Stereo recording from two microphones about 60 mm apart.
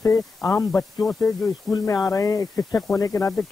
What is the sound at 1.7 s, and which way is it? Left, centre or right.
Speech, left.